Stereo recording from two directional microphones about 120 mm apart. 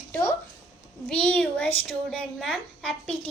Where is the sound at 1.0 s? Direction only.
5° left (ahead or behind).